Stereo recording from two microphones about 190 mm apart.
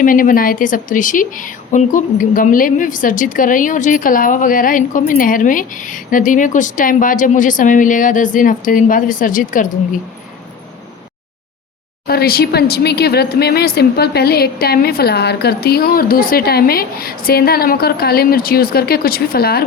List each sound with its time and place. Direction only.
0.0 s a woman's voice: 45° left (ahead or behind)
12.0 s speech: 55° left (ahead or behind)